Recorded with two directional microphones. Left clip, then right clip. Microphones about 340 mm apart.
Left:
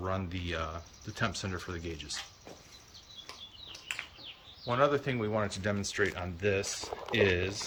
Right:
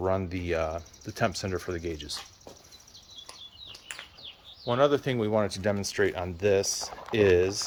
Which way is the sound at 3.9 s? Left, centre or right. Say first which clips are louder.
Left 4 dB; centre.